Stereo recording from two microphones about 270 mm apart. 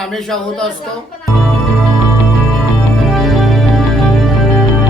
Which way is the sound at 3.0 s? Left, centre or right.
Centre.